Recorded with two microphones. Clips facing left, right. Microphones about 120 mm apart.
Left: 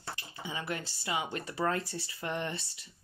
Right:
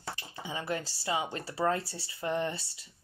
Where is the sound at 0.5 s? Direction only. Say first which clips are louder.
Right 3 dB; 30° right (ahead or behind).